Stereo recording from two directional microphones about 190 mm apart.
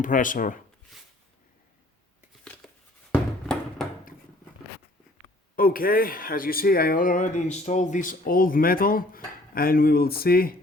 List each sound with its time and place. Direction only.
0.0 s speech: 45° left (ahead or behind)
2.6 s a sound: 5° left (ahead or behind)
5.5 s speech: 50° left (ahead or behind)